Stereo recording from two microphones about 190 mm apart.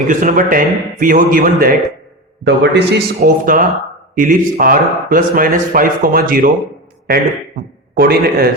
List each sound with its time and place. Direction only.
0.1 s speech: 45° right (ahead or behind)
2.4 s speech: 65° right (ahead or behind); by 6.5 s 50° right (ahead or behind)
7.9 s speech: 55° right (ahead or behind)